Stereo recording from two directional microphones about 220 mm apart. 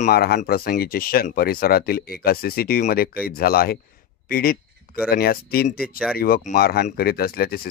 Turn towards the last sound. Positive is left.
turn(degrees=45)  # may be behind; listen again after turning